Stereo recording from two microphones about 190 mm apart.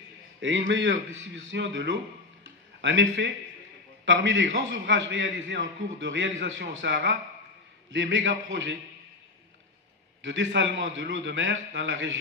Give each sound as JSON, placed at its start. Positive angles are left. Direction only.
{"t": 0.4, "sound": "a man's voice", "side_deg": -70}
{"t": 2.4, "sound": "a sound", "side_deg": -70}
{"t": 4.0, "sound": "a man's voice", "side_deg": -70}
{"t": 10.2, "sound": "a man's voice", "side_deg": -70}